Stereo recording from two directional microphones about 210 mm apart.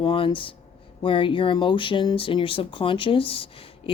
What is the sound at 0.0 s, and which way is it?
Speech, 20° left (ahead or behind).